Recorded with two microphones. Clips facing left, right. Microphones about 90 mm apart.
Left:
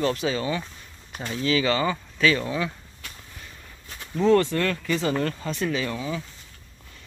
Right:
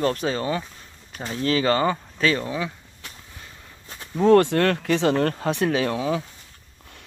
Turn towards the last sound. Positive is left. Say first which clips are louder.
# right 5 dB
turn(degrees=-65)  # may be behind; listen again after turning